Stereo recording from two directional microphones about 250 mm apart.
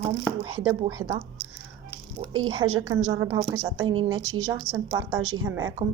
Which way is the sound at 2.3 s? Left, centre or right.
Right.